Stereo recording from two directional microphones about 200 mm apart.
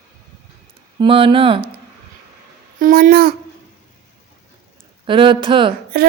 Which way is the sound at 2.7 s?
45° right (ahead or behind).